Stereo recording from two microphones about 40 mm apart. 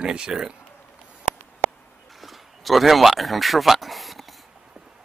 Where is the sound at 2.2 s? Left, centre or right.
Centre.